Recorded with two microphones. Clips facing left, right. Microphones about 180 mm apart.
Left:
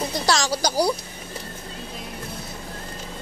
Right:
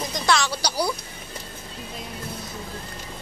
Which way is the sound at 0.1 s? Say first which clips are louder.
Right 2 dB; 40° left (ahead or behind).